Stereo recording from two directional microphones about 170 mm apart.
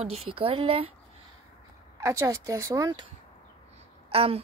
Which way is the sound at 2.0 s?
20° right (ahead or behind).